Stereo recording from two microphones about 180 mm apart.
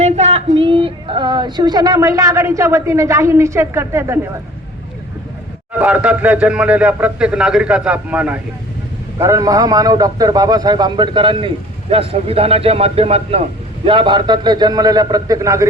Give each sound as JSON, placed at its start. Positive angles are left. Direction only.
{"t": 0.0, "sound": "speech", "side_deg": -35}
{"t": 5.8, "sound": "a man's voice", "side_deg": -5}
{"t": 9.1, "sound": "a man's voice", "side_deg": -20}